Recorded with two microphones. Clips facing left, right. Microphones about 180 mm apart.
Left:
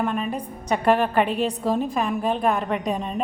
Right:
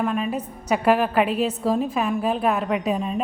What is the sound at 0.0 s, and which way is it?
A woman's voice, centre (ahead or behind).